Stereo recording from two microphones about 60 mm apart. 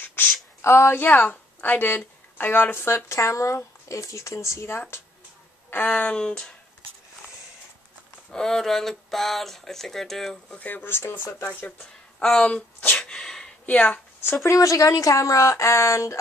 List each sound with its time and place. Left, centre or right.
0.0 s a sound: left
0.6 s speech: left
0.9 s a woman's voice: left
3.2 s speech: left
5.9 s speech: left
6.2 s speech: centre
8.3 s speech: centre
10.5 s speech: left
11.6 s speech: centre
12.4 s speech: left
13.1 s a sound: centre
13.7 s speech: left
14.5 s speech: left
15.5 s speech: left